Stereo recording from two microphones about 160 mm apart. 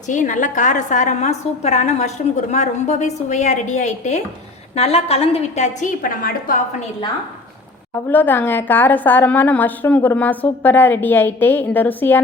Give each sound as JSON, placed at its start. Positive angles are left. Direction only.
{"t": 0.1, "sound": "a woman's voice", "side_deg": 55}
{"t": 8.1, "sound": "a woman's voice", "side_deg": 10}